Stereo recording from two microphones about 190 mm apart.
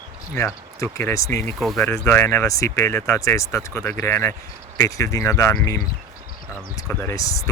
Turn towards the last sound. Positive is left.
turn(degrees=15)  # may be behind; listen again after turning